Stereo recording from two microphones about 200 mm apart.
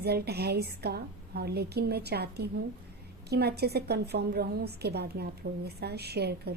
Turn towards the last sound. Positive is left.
turn(degrees=-55)  # may be behind; listen again after turning